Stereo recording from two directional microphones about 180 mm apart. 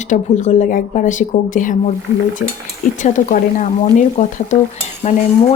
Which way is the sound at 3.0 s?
50° left (ahead or behind).